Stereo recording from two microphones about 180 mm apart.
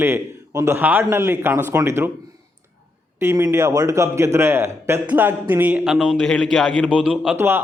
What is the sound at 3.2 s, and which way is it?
A man's voice, 15° right (ahead or behind).